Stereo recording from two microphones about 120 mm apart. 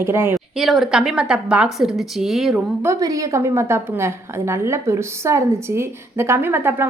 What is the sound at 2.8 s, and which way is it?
A woman's voice, 25° right (ahead or behind).